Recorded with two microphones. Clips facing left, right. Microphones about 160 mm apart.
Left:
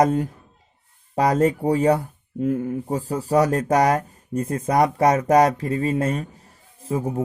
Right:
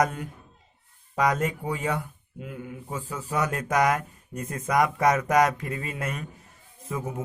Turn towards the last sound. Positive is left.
turn(degrees=30)  # may be behind; listen again after turning